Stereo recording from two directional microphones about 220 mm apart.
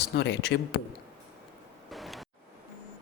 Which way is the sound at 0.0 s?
50° left (ahead or behind).